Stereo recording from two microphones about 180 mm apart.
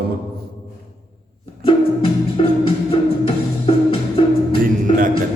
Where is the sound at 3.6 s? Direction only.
30° left (ahead or behind).